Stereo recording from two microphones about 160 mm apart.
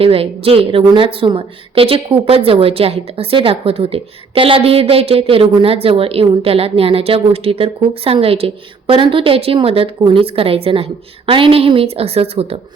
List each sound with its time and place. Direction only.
0.0 s a woman's voice: 35° right (ahead or behind)